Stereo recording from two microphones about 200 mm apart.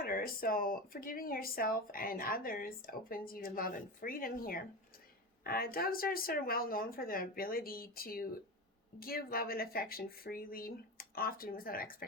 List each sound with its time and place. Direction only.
0.0 s speech: 45° left (ahead or behind)